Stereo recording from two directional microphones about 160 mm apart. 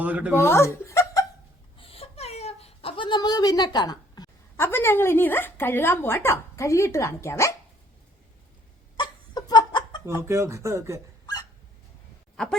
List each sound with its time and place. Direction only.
0.0 s speech: 10° right (ahead or behind)
0.3 s chuckle: 15° left (ahead or behind)
1.8 s a sound: 40° left (ahead or behind)
4.5 s a woman's voice: 15° left (ahead or behind)
9.0 s laughter: 25° left (ahead or behind)
10.2 s speech: 15° right (ahead or behind)
12.4 s speech: 5° left (ahead or behind)